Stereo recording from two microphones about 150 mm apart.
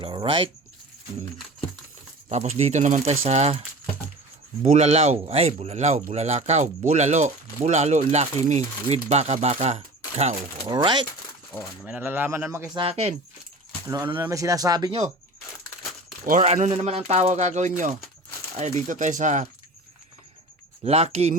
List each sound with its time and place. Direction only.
0.0 s speech: 35° right (ahead or behind)
2.3 s speech: 50° right (ahead or behind)
4.6 s speech: 45° right (ahead or behind)
10.7 s speech: 30° right (ahead or behind)
11.9 s a man's voice: 10° right (ahead or behind)
12.7 s speech: 40° right (ahead or behind)
13.8 s speech: 20° right (ahead or behind)
16.4 s speech: 50° right (ahead or behind)
20.8 s speech: 45° right (ahead or behind)